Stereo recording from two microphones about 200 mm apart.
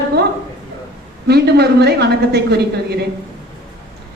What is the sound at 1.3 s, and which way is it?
A woman's voice, 55° right (ahead or behind).